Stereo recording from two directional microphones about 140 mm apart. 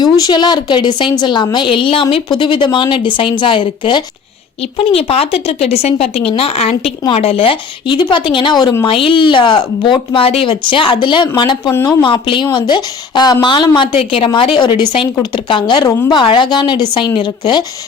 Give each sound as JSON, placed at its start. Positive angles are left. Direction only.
{"t": 0.0, "sound": "speech", "side_deg": 30}